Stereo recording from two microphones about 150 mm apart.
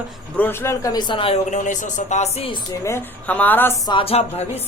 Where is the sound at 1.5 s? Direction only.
55° left (ahead or behind).